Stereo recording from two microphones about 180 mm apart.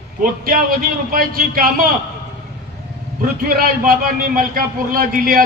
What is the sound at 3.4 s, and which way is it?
Speech, 55° right (ahead or behind).